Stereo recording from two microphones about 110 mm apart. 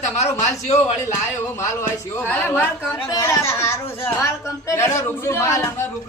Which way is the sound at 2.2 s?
15° left (ahead or behind).